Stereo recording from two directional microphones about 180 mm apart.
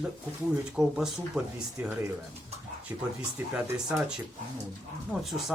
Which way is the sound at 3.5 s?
Centre (ahead or behind).